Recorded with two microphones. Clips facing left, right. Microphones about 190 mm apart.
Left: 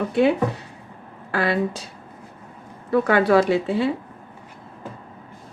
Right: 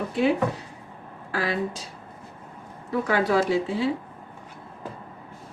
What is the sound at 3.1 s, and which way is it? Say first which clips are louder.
Speech: left 5 dB; 65° left (ahead or behind).